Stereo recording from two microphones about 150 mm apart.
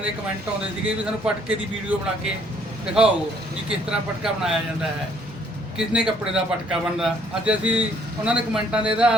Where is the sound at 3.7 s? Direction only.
5° right (ahead or behind).